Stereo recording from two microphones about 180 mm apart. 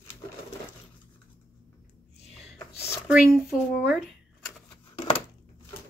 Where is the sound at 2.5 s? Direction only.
15° left (ahead or behind).